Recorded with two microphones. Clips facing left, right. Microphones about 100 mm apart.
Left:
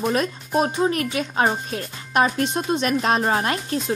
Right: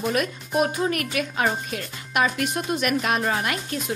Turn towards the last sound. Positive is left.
turn(degrees=35)  # may be behind; listen again after turning